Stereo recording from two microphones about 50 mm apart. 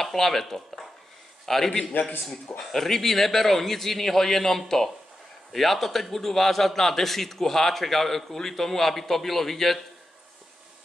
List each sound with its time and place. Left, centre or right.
0.0 s a man's voice: centre